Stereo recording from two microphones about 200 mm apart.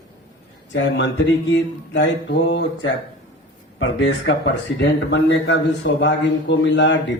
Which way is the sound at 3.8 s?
70° left (ahead or behind).